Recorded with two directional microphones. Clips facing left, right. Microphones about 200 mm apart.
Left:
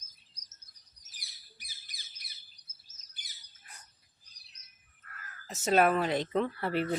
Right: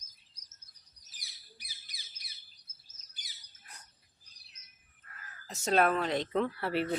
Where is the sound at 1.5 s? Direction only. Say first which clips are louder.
Left 1 dB; 50° left (ahead or behind).